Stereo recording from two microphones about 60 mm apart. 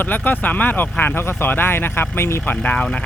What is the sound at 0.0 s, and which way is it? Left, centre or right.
Speech, left.